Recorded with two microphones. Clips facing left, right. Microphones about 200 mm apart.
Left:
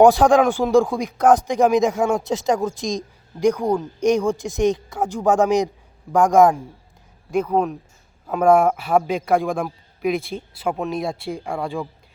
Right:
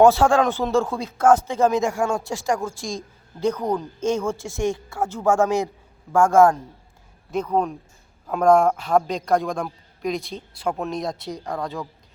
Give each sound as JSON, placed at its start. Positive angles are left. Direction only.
{"t": 0.0, "sound": "a man's voice", "side_deg": 15}